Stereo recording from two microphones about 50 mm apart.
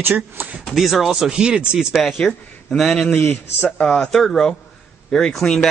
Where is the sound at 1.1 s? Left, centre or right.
Centre.